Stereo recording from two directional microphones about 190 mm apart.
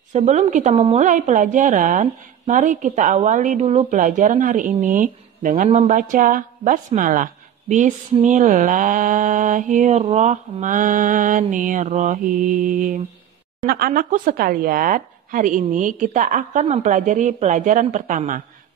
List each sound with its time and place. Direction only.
0.1 s a woman's voice: 35° right (ahead or behind)